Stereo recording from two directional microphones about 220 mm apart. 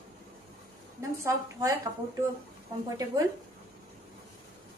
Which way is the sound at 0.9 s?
15° right (ahead or behind).